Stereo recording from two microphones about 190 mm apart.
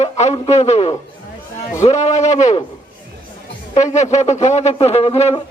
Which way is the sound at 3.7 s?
40° left (ahead or behind).